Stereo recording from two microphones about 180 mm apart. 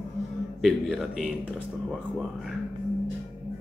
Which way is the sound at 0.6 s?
Centre (ahead or behind).